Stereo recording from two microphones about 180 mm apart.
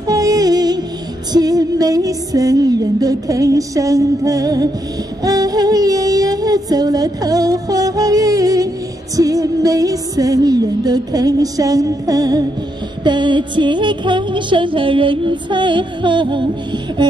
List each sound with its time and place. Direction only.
0.0 s music: 20° right (ahead or behind)